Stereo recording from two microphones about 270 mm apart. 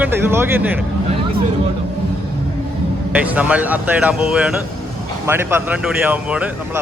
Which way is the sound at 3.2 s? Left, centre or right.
Centre.